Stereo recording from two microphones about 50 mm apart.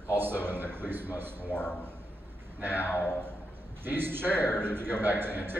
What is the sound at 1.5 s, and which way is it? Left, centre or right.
Speech, centre.